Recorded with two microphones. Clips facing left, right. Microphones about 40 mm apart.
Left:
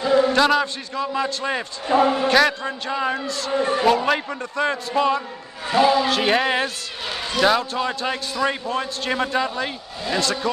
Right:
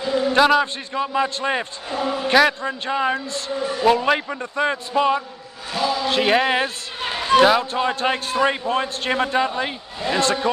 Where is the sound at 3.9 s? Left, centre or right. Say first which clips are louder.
Right 1 dB; centre.